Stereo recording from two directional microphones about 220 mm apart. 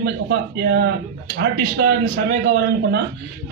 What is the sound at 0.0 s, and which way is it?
Speech, 45° right (ahead or behind).